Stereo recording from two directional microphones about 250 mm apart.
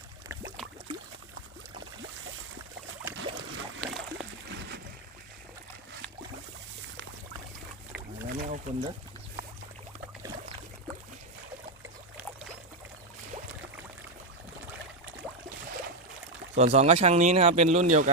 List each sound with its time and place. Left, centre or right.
3.8 s a sound: centre
8.4 s wild animals: right
16.6 s speech: right